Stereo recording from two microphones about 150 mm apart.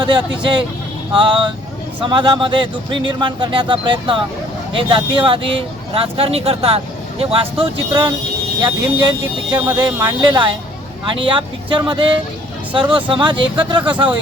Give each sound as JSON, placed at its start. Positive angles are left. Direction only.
{"t": 0.0, "sound": "speech", "side_deg": -30}
{"t": 2.0, "sound": "speech", "side_deg": -35}